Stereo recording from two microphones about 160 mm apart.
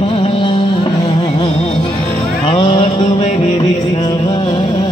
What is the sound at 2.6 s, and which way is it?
Music, 30° left (ahead or behind).